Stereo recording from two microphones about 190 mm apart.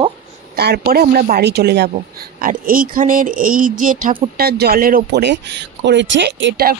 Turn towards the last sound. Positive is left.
turn(degrees=-65)  # may be behind; listen again after turning